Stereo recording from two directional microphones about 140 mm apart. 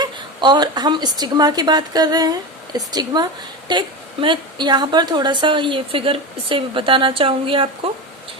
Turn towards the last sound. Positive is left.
turn(degrees=-40)  # may be behind; listen again after turning